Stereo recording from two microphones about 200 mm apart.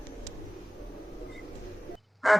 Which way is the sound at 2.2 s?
Centre (ahead or behind).